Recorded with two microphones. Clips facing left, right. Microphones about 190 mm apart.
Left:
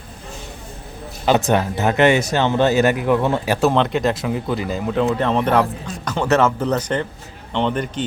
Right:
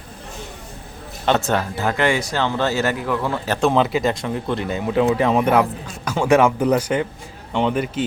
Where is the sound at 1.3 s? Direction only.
15° left (ahead or behind).